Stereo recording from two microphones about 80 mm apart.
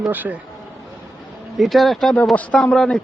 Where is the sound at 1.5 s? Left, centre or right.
Centre.